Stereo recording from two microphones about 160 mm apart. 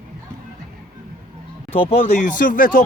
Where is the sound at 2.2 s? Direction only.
55° left (ahead or behind).